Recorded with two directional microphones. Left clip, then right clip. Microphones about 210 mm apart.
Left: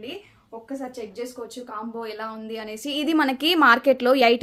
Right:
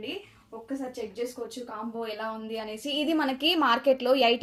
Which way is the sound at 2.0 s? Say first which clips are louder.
Left 1 dB; 25° left (ahead or behind).